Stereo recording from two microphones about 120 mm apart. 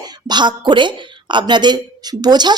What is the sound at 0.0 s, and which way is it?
A woman's voice, 35° right (ahead or behind).